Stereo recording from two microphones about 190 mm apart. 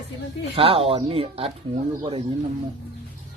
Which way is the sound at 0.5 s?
30° right (ahead or behind).